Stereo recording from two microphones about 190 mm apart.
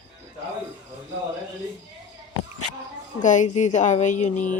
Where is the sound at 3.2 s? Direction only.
40° left (ahead or behind).